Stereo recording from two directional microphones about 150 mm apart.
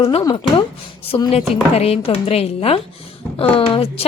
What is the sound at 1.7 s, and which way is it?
A woman's voice, 45° left (ahead or behind).